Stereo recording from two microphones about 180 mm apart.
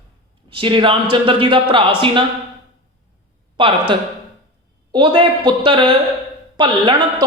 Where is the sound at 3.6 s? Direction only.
25° right (ahead or behind).